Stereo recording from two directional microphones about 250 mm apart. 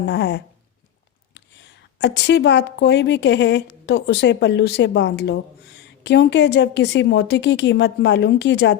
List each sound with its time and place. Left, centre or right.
0.0 s a woman's voice: left